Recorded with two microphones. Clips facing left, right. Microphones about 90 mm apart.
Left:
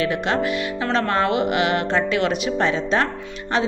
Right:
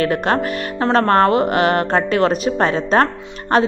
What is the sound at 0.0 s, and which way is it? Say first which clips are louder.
A woman's voice: right 4 dB; 45° right (ahead or behind).